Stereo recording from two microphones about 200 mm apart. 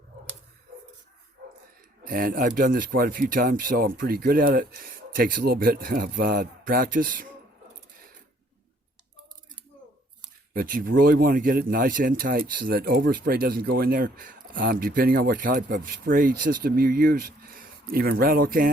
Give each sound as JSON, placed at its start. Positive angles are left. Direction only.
{"t": 2.0, "sound": "speech", "side_deg": -45}
{"t": 10.5, "sound": "speech", "side_deg": -45}